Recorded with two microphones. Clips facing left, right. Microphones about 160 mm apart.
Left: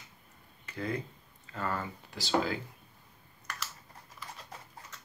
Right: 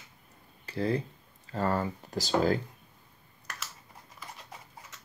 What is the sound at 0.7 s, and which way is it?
Speech, 35° right (ahead or behind).